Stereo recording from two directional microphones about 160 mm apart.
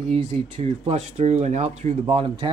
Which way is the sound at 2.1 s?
35° right (ahead or behind).